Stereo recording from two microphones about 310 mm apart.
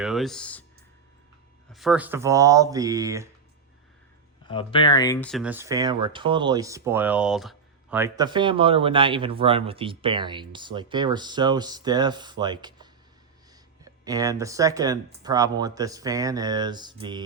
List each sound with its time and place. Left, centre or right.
0.0 s speech: centre
1.7 s speech: centre
4.4 s speech: centre